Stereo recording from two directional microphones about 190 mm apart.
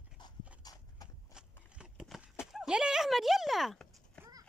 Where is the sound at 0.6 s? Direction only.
20° left (ahead or behind).